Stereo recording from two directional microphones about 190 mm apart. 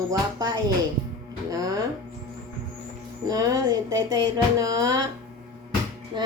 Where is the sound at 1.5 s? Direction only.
20° right (ahead or behind).